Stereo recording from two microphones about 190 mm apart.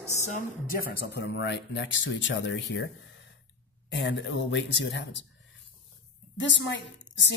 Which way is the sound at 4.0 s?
70° left (ahead or behind).